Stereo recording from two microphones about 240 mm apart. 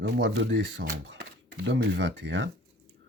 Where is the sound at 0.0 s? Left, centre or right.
Right.